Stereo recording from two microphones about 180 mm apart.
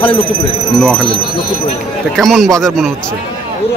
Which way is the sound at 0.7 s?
Centre (ahead or behind).